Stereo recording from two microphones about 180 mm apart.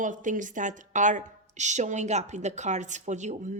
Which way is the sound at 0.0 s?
45° right (ahead or behind).